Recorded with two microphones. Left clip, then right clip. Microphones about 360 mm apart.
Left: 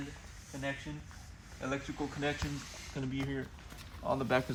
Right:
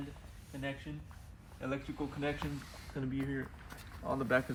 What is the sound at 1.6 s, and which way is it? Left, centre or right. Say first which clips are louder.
Speech: left 2 dB; centre.